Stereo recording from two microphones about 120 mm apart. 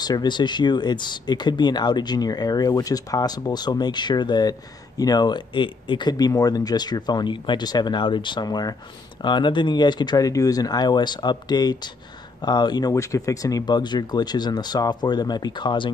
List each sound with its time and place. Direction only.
0.0 s speech: 35° left (ahead or behind)
12.9 s speech: 25° left (ahead or behind)